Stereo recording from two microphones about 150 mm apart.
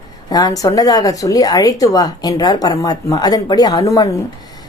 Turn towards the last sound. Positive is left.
turn(degrees=20)  # may be behind; listen again after turning